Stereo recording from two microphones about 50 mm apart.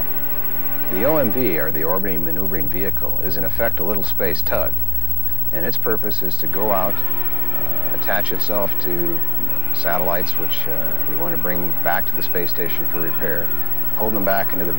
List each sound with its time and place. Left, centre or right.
0.8 s speech: centre
8.1 s speech: right